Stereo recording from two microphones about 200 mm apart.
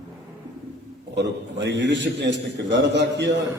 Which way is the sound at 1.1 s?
60° right (ahead or behind).